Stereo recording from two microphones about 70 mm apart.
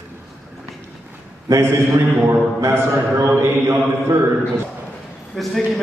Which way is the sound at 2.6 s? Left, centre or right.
Right.